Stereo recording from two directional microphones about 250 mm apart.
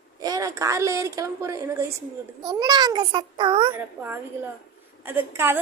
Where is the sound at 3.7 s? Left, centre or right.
Centre.